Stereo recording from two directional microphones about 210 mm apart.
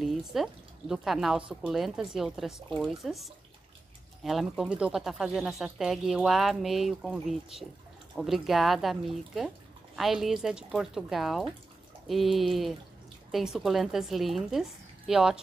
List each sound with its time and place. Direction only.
0.0 s a woman's voice: centre (ahead or behind)